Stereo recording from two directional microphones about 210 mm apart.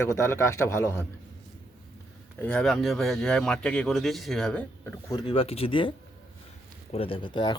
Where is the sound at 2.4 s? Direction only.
5° left (ahead or behind); by 5.9 s 25° left (ahead or behind).